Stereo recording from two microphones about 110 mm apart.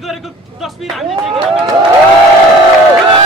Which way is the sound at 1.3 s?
55° right (ahead or behind).